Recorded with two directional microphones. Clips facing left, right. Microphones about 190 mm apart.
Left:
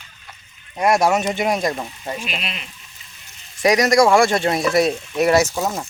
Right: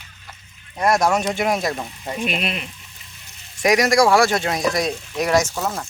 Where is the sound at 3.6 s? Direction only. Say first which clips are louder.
Left 1 dB; 10° right (ahead or behind); by 5.8 s 10° left (ahead or behind).